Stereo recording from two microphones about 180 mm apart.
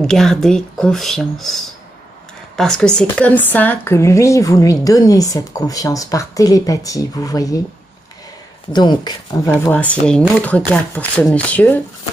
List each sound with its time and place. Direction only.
0.0 s speech: 5° left (ahead or behind); by 7.6 s 20° left (ahead or behind)
8.7 s speech: 25° left (ahead or behind)
9.5 s speech: 10° left (ahead or behind)